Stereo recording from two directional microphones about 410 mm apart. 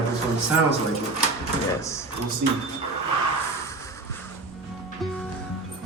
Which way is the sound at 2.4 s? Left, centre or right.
Right.